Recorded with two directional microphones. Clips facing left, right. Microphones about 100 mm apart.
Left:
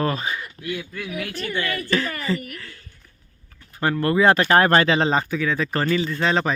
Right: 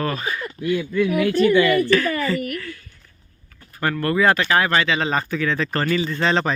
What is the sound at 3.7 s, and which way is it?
Speech, 20° left (ahead or behind).